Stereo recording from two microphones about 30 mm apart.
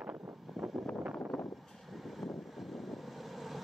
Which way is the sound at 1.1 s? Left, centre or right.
Centre.